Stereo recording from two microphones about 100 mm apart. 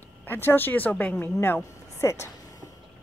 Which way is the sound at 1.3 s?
25° left (ahead or behind).